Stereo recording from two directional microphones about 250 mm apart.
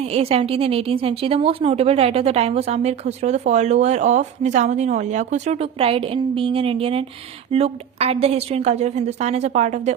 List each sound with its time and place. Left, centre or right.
0.1 s a woman's voice: right